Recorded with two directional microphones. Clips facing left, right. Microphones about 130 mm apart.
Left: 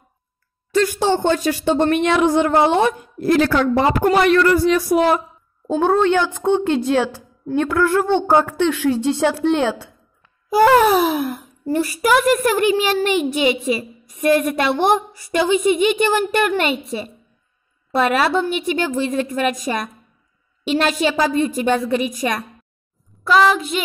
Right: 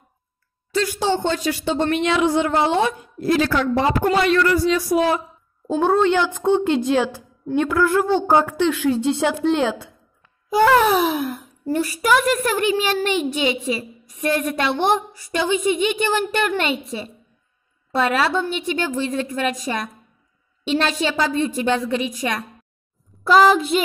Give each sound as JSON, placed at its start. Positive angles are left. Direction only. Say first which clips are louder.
{"t": 0.7, "sound": "speech", "louder": "left 4 dB", "side_deg": 50}
{"t": 3.7, "sound": "a woman's voice", "louder": "left 2 dB", "side_deg": 45}
{"t": 5.8, "sound": "a woman's voice", "louder": "left 1 dB", "side_deg": -5}
{"t": 9.3, "sound": "a woman's voice", "louder": "left 1 dB", "side_deg": 0}
{"t": 22.2, "sound": "a woman's voice", "louder": "left 3 dB", "side_deg": 30}
{"t": 23.2, "sound": "child singing", "louder": "right 1 dB", "side_deg": -30}